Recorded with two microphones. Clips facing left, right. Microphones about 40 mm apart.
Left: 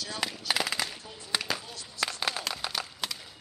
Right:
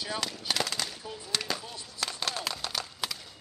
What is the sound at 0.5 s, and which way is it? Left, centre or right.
Gunshot, centre.